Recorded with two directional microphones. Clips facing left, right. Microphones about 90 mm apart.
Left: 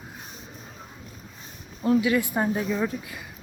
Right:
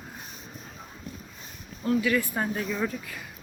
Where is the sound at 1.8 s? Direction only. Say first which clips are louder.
Left 3 dB; 20° left (ahead or behind).